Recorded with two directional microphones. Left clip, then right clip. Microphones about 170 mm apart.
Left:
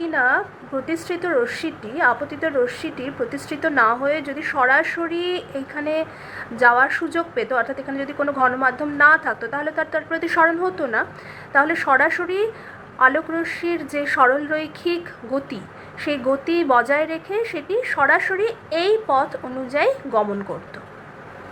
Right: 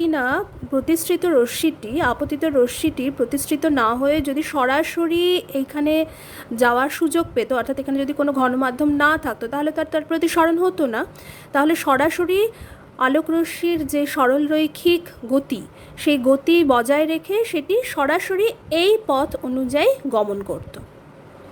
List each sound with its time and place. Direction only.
0.0 s a woman's voice: 90° right